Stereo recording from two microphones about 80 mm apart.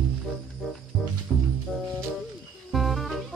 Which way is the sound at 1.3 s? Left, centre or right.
Centre.